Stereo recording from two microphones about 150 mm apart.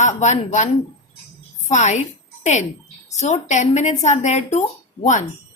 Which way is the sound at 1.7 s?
50° left (ahead or behind).